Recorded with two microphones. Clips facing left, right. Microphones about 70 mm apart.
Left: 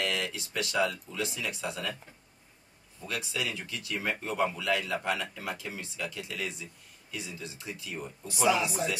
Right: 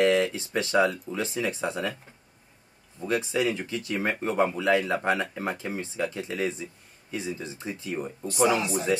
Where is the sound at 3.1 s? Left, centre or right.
Right.